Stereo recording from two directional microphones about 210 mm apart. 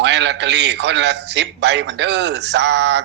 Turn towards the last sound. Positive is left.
turn(degrees=-55)  # may be behind; listen again after turning